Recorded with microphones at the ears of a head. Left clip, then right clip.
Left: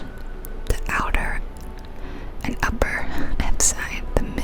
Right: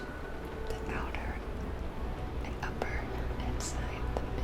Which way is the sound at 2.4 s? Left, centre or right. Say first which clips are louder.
Left 15 dB; left.